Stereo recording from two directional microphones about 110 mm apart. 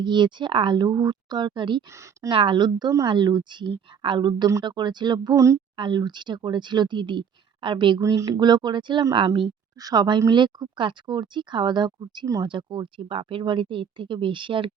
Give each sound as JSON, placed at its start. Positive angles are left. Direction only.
{"t": 0.0, "sound": "speech", "side_deg": -45}
{"t": 1.9, "sound": "speech", "side_deg": -25}
{"t": 2.3, "sound": "speech", "side_deg": -50}
{"t": 5.7, "sound": "speech", "side_deg": -45}
{"t": 8.0, "sound": "speech", "side_deg": -30}
{"t": 12.5, "sound": "speech", "side_deg": -45}